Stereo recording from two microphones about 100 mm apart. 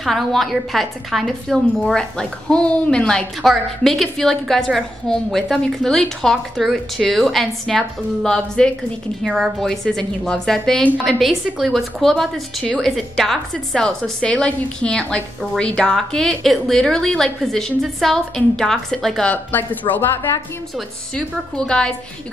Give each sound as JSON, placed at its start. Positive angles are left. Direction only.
{"t": 0.0, "sound": "a woman's voice", "side_deg": 0}
{"t": 19.3, "sound": "speech", "side_deg": 20}
{"t": 21.1, "sound": "a woman's voice", "side_deg": 10}